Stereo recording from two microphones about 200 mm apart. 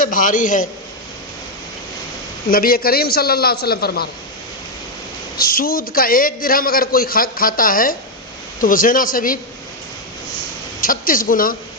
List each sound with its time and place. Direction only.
0.0 s a man's voice: 40° left (ahead or behind)
2.5 s a man's voice: 45° left (ahead or behind)
5.4 s a woman's voice: 45° left (ahead or behind)
10.8 s a woman's voice: 45° left (ahead or behind)